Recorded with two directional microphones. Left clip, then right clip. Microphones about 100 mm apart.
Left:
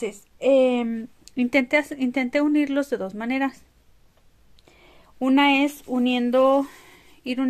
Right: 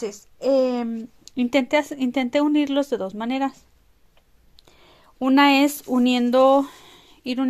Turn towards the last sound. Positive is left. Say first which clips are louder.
# right 1 dB
turn(degrees=-35)  # may be behind; listen again after turning